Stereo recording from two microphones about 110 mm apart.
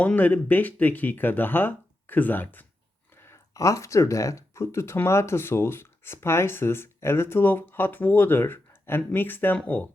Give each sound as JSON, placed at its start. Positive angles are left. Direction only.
{"t": 0.0, "sound": "speech", "side_deg": 15}